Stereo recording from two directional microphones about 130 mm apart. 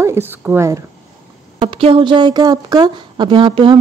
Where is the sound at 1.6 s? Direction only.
45° right (ahead or behind).